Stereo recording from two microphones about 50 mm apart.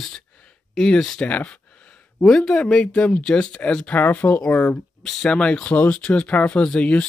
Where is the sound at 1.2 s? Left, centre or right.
Left.